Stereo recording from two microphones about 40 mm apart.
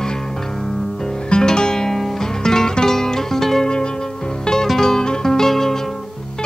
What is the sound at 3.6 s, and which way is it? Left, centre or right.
Music, left.